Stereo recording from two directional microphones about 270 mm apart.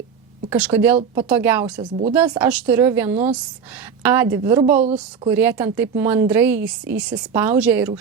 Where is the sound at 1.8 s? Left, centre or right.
Right.